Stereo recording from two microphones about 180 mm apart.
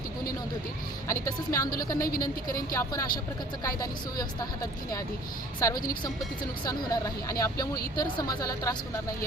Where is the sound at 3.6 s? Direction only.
20° left (ahead or behind).